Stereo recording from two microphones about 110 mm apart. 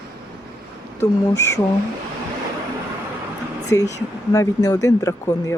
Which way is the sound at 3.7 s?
30° left (ahead or behind).